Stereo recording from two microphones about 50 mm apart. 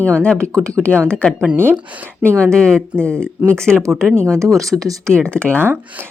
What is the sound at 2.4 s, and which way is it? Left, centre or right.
Speech, centre.